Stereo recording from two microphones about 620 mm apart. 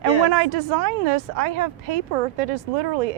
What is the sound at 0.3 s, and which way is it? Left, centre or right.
A woman's voice, right.